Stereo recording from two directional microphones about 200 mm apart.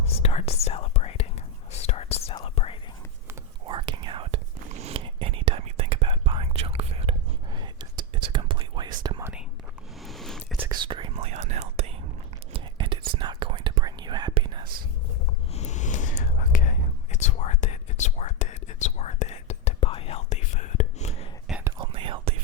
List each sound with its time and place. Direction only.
0.2 s whispering: 30° left (ahead or behind)
3.7 s whispering: 25° right (ahead or behind)
10.0 s a sound: centre (ahead or behind)
10.7 s whispering: 25° right (ahead or behind)
15.5 s whispering: 35° left (ahead or behind)
21.6 s whispering: 25° right (ahead or behind)